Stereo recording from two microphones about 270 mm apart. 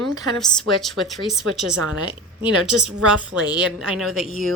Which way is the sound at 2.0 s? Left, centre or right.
Centre.